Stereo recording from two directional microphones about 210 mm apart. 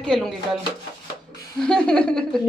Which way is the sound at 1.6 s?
5° left (ahead or behind).